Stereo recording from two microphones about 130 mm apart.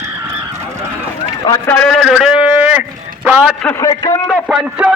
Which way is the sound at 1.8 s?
5° left (ahead or behind).